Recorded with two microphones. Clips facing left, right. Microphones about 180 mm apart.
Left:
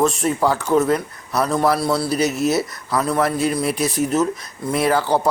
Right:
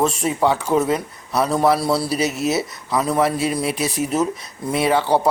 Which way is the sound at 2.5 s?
5° right (ahead or behind).